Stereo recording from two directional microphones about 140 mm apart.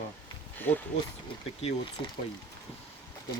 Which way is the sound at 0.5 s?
15° left (ahead or behind).